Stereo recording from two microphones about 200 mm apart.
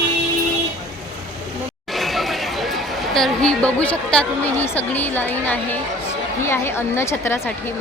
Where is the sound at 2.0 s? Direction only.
Centre (ahead or behind).